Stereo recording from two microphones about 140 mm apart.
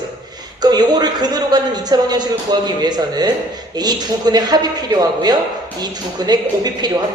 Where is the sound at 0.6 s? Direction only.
30° right (ahead or behind).